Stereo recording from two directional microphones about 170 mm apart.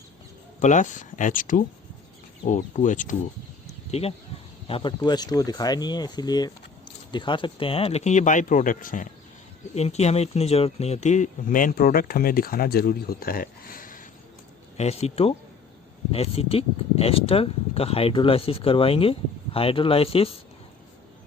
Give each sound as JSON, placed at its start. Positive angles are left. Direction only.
{"t": 0.6, "sound": "speech", "side_deg": 45}
{"t": 3.9, "sound": "speech", "side_deg": 35}
{"t": 9.7, "sound": "speech", "side_deg": 40}
{"t": 14.8, "sound": "speech", "side_deg": 40}